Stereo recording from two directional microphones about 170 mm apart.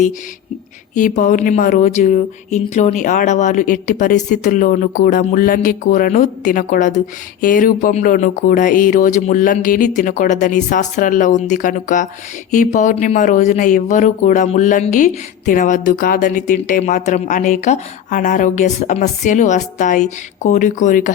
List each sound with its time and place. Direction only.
0.9 s speech: 50° left (ahead or behind)